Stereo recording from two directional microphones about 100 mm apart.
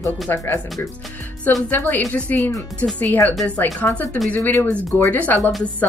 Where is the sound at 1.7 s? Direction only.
20° left (ahead or behind).